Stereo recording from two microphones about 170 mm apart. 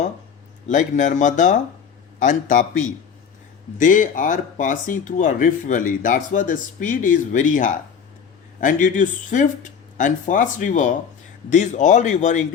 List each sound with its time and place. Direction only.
0.7 s speech: 45° left (ahead or behind)
3.8 s speech: 50° left (ahead or behind)